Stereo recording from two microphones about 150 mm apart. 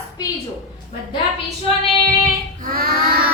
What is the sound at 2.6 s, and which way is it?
Child singing, 75° right (ahead or behind).